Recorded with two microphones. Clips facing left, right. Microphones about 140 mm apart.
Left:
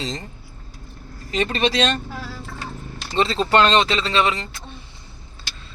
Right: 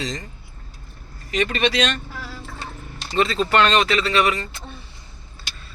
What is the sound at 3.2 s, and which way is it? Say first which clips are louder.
Speech: left 1 dB; 30° left (ahead or behind).